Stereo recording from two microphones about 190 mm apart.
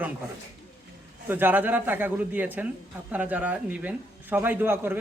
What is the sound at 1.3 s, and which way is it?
A man's voice, 10° right (ahead or behind).